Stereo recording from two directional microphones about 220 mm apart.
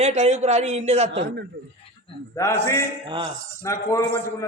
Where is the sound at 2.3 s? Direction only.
15° left (ahead or behind).